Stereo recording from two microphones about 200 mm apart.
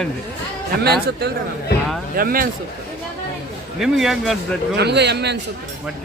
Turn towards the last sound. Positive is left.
turn(degrees=-55)  # may be behind; listen again after turning